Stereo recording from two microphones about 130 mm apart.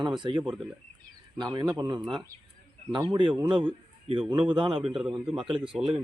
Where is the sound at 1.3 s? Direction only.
35° right (ahead or behind).